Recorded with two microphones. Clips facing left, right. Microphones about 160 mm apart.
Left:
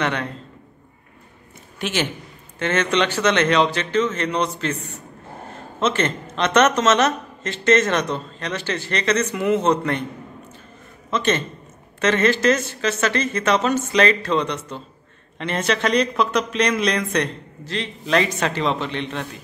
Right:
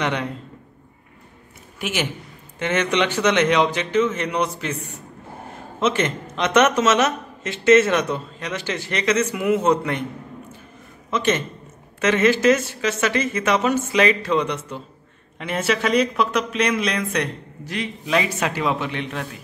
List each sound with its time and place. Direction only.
0.0 s speech: 15° right (ahead or behind)
1.8 s a man's voice: 10° right (ahead or behind)
11.1 s a man's voice: 10° right (ahead or behind)